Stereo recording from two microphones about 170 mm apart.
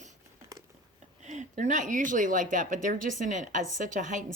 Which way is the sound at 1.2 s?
45° right (ahead or behind).